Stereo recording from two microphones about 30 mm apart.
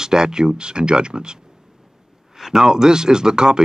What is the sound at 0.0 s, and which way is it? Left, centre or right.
Speech, right.